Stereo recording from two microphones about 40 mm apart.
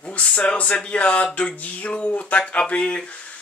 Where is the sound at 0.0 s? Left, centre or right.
Left.